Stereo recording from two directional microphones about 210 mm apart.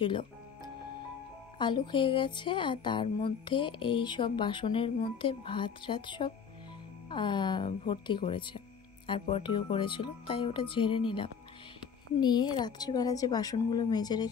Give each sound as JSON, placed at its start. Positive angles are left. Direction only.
{"t": 0.0, "sound": "a woman's voice", "side_deg": 25}
{"t": 1.6, "sound": "a woman's voice", "side_deg": 20}